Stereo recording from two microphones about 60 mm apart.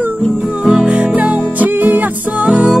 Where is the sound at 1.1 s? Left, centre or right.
Right.